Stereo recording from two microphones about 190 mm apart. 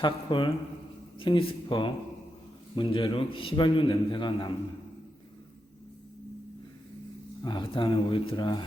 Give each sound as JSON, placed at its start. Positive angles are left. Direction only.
{"t": 0.0, "sound": "a man's voice", "side_deg": 25}
{"t": 7.4, "sound": "a man's voice", "side_deg": 25}